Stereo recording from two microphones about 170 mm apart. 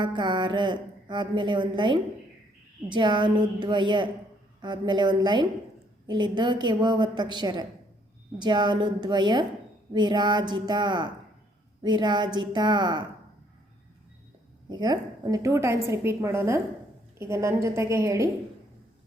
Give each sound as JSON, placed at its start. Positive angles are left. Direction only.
{"t": 0.0, "sound": "a woman's voice", "side_deg": -30}
{"t": 14.7, "sound": "a woman's voice", "side_deg": -25}